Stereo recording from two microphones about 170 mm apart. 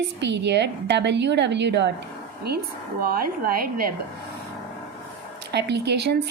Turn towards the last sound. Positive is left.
turn(degrees=-75)  # may be behind; listen again after turning